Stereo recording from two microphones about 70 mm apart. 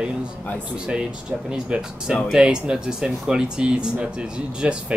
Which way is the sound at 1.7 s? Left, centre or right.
Centre.